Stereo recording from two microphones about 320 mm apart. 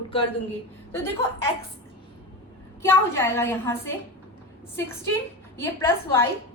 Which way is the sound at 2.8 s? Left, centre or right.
Centre.